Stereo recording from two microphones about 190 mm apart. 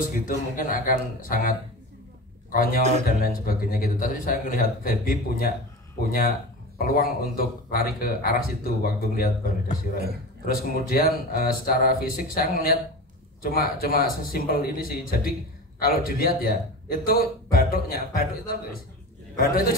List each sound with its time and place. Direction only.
0.1 s speech: 45° left (ahead or behind)
2.5 s speech: 50° left (ahead or behind)
6.8 s a man's voice: 50° left (ahead or behind)